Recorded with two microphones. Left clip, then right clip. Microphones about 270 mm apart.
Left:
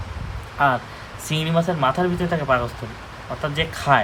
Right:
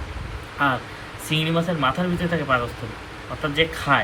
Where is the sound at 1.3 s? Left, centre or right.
Left.